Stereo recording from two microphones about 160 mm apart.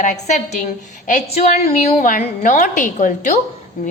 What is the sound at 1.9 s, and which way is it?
A woman's voice, 50° left (ahead or behind).